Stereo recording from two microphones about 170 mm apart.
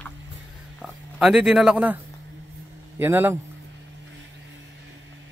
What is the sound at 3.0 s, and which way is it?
Speech, 10° right (ahead or behind).